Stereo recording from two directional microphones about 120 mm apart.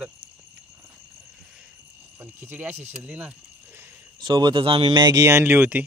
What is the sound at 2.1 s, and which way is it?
Speech, 15° right (ahead or behind).